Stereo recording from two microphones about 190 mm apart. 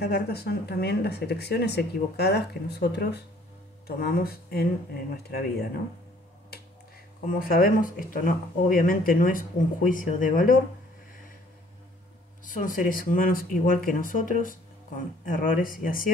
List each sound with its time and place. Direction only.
0.0 s speech: 60° left (ahead or behind)
7.2 s speech: 50° left (ahead or behind)
12.4 s speech: 45° left (ahead or behind)